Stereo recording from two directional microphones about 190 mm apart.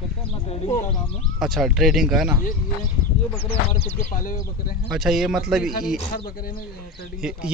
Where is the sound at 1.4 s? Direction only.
Centre (ahead or behind).